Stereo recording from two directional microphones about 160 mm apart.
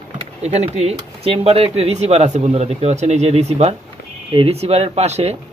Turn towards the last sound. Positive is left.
turn(degrees=-45)  # may be behind; listen again after turning